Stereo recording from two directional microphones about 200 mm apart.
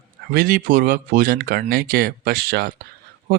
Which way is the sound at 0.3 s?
45° right (ahead or behind).